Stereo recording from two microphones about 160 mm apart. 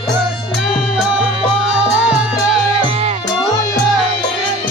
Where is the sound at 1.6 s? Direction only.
5° right (ahead or behind).